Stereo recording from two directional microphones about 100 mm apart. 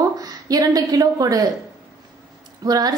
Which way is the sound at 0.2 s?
40° right (ahead or behind).